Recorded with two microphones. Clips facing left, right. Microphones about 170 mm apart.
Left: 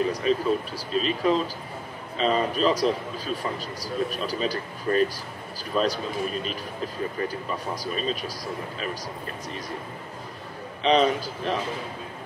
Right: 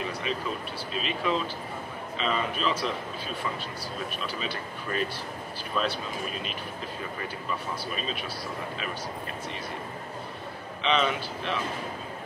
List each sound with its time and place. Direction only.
0.1 s speech: 40° left (ahead or behind)
7.2 s speech: 40° left (ahead or behind)
10.8 s speech: 40° left (ahead or behind)